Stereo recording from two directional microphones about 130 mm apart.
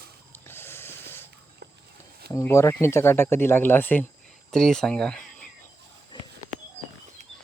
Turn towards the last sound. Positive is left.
turn(degrees=-65)  # may be behind; listen again after turning